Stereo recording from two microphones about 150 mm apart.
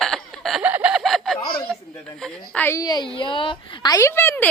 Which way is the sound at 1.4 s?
80° left.